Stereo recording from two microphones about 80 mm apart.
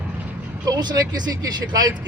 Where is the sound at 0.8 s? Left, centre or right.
Right.